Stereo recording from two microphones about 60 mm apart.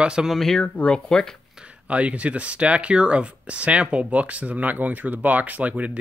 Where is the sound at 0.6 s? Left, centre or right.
Centre.